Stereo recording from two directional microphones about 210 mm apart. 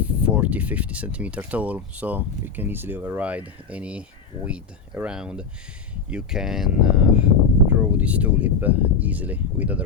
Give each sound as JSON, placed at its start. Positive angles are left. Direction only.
{"t": 0.0, "sound": "speech", "side_deg": -5}